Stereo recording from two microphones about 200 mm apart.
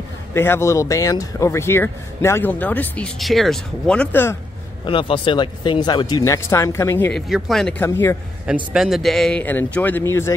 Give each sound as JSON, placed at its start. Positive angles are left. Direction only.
{"t": 0.3, "sound": "speech", "side_deg": 10}
{"t": 4.8, "sound": "speech", "side_deg": 25}
{"t": 7.8, "sound": "speech", "side_deg": 10}
{"t": 8.7, "sound": "speech", "side_deg": 0}